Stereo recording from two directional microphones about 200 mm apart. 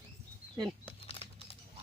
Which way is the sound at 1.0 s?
25° left (ahead or behind).